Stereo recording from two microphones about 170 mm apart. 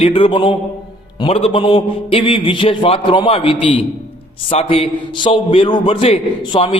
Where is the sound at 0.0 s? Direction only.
30° left (ahead or behind).